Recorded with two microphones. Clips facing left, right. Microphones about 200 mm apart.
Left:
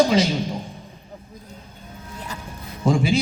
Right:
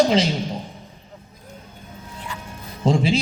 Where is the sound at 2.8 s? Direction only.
25° right (ahead or behind).